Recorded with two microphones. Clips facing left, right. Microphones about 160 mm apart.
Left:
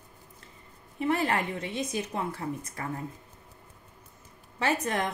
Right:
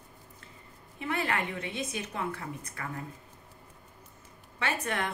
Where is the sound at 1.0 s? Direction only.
35° left (ahead or behind).